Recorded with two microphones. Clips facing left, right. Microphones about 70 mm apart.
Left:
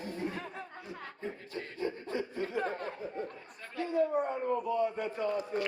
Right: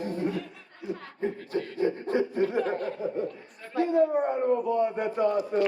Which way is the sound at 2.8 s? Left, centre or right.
Left.